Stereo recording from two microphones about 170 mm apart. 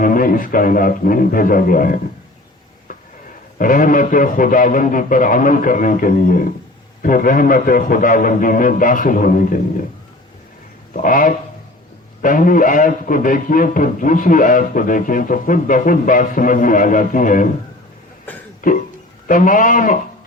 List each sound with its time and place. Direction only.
0.0 s speech: 55° left (ahead or behind)
3.6 s a man's voice: 55° left (ahead or behind)
10.9 s a man's voice: 55° left (ahead or behind)
18.6 s a man's voice: 55° left (ahead or behind)